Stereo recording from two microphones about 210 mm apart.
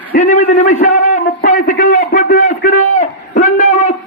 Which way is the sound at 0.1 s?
40° left (ahead or behind).